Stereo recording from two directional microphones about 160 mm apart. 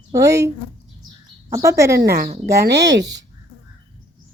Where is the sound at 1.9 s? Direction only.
80° right.